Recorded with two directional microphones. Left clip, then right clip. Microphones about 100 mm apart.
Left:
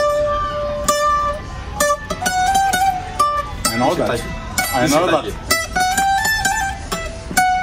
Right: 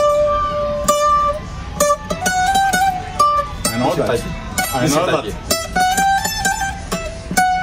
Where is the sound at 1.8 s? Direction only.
15° right (ahead or behind).